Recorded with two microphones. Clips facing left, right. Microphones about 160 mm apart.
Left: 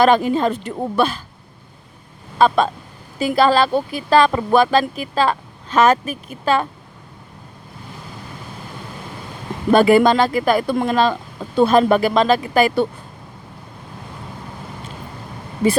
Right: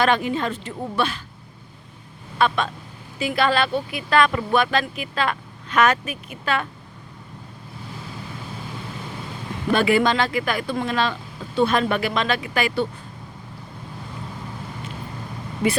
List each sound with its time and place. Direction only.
0.0 s a woman's voice: 40° left (ahead or behind)
2.4 s speech: 35° left (ahead or behind)
9.7 s speech: 40° left (ahead or behind)